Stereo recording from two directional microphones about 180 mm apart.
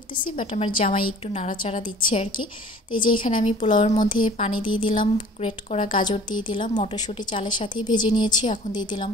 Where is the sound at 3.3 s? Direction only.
45° left (ahead or behind).